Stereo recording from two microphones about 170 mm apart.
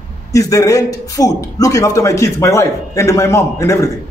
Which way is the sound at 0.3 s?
20° left (ahead or behind).